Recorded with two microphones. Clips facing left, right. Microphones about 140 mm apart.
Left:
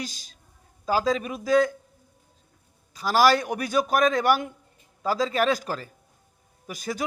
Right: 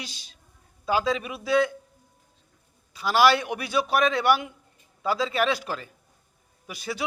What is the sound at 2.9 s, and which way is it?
A man's voice, 40° left (ahead or behind).